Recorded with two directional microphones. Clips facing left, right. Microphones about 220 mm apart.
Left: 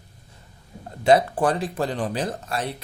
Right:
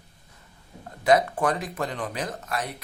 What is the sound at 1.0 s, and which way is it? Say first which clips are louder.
Speech: left 3 dB; 30° left (ahead or behind).